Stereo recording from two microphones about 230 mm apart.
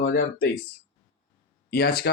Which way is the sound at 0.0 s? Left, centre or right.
Left.